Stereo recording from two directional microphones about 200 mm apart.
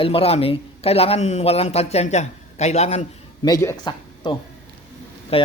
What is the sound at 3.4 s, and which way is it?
A man's voice, 15° left (ahead or behind).